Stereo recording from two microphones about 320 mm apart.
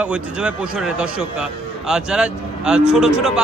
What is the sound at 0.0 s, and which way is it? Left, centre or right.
A man's voice, centre.